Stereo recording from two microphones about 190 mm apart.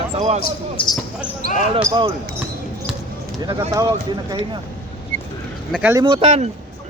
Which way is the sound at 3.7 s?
20° right (ahead or behind).